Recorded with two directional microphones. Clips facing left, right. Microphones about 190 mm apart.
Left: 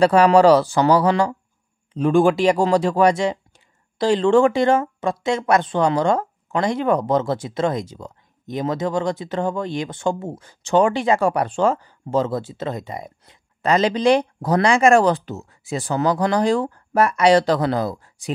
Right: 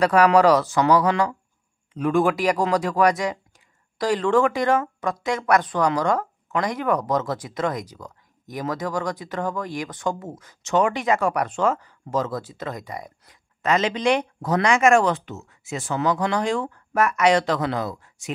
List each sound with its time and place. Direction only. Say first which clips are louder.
0.0 s speech: left 3 dB; 30° left (ahead or behind)